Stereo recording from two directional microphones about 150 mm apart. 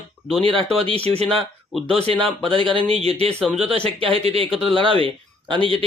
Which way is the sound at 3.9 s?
40° right (ahead or behind).